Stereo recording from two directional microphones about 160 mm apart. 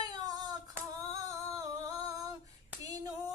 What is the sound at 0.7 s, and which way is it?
Female singing, 20° right (ahead or behind).